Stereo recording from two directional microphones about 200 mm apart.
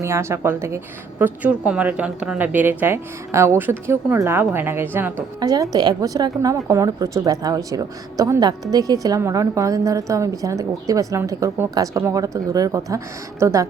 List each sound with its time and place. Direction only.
0.0 s a woman's voice: 15° right (ahead or behind)